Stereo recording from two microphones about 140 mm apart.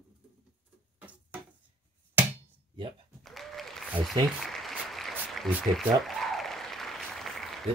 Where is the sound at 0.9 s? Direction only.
10° right (ahead or behind).